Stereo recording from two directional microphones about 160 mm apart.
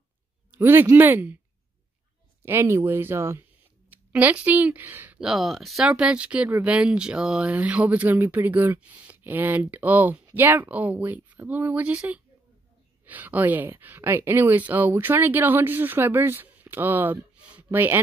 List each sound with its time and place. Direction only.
0.5 s speech: 15° right (ahead or behind)
2.4 s speech: 15° right (ahead or behind)